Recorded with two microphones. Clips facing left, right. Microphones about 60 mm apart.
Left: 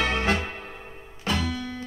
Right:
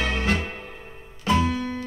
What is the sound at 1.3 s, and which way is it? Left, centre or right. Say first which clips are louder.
Music: right 6 dB; right.